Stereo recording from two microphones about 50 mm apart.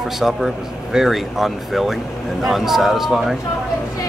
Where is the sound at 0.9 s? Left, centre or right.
Centre.